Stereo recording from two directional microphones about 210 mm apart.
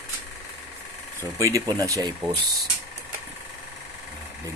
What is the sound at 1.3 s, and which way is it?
Speech, 15° right (ahead or behind).